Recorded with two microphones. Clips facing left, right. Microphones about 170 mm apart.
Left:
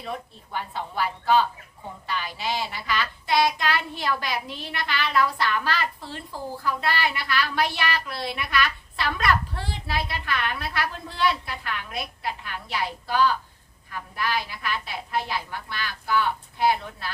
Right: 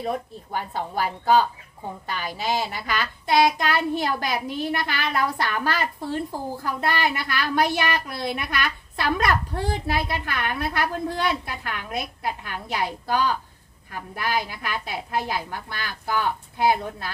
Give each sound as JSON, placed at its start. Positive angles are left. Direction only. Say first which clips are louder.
{"t": 0.0, "sound": "a child's voice", "louder": "right 6 dB", "side_deg": -45}